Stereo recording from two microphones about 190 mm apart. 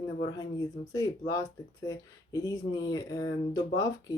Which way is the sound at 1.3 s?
15° left (ahead or behind).